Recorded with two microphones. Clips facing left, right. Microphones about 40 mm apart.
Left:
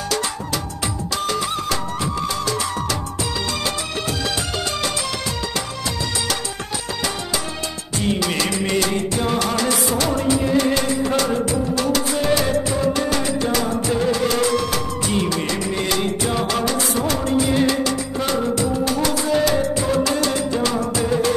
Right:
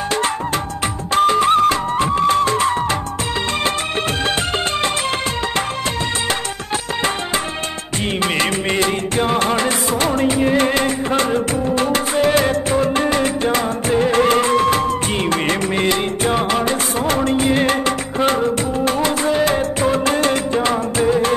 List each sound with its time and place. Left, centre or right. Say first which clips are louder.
1.1 s music: right 12 dB; right
8.0 s music: right 2 dB; right